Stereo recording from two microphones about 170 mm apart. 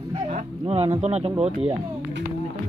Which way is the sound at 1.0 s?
35° right (ahead or behind).